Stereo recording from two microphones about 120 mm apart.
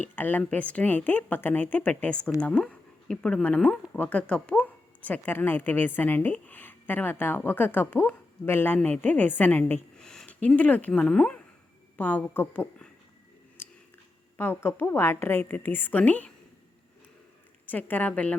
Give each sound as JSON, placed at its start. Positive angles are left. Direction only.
{"t": 0.0, "sound": "a woman's voice", "side_deg": 15}
{"t": 13.6, "sound": "a sound", "side_deg": 20}
{"t": 14.3, "sound": "a woman's voice", "side_deg": 20}
{"t": 17.7, "sound": "a woman's voice", "side_deg": 15}